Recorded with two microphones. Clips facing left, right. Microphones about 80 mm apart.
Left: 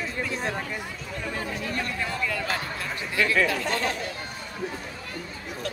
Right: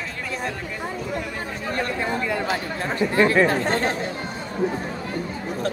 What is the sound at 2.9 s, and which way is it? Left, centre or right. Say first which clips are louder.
Chatter: right 7 dB; right.